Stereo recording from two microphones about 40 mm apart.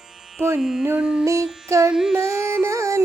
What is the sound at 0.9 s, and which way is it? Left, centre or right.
Music, right.